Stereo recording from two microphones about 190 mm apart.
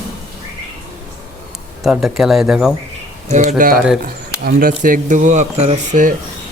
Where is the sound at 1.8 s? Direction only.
Centre (ahead or behind).